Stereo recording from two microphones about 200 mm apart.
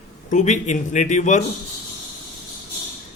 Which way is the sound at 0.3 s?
35° left (ahead or behind).